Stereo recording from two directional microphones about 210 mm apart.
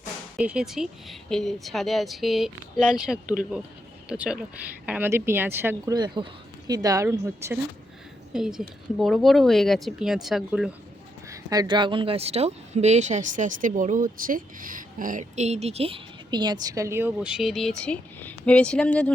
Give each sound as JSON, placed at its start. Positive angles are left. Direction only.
{"t": 0.3, "sound": "a woman's voice", "side_deg": -5}
{"t": 8.3, "sound": "a woman's voice", "side_deg": 0}
{"t": 11.3, "sound": "speech", "side_deg": -15}